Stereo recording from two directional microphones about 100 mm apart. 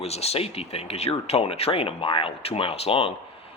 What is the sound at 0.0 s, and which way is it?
Speech, 90° left.